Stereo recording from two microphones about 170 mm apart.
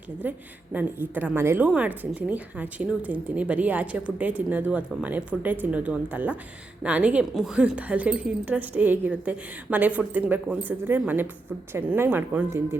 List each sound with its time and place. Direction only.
0.2 s a woman's voice: 10° right (ahead or behind)